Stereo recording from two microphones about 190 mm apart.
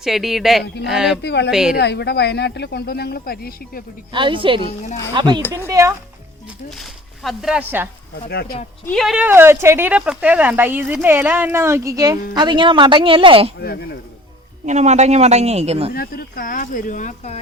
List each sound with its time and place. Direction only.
0.0 s speech: centre (ahead or behind)
1.2 s speech: 65° left (ahead or behind)
1.5 s speech: 5° right (ahead or behind)
1.7 s speech: 60° left (ahead or behind)
4.1 s speech: 25° right (ahead or behind)
6.7 s speech: centre (ahead or behind)
8.3 s speech: 55° left (ahead or behind)
8.9 s speech: centre (ahead or behind); by 13.5 s 30° right (ahead or behind)
13.6 s speech: 55° left (ahead or behind)
14.7 s a man's voice: 35° right (ahead or behind)
16.0 s speech: 50° left (ahead or behind)